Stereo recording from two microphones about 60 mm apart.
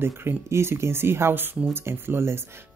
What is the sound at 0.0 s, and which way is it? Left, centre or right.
Speech, right.